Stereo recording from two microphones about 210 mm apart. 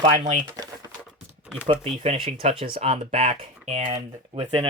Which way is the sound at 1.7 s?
25° right (ahead or behind).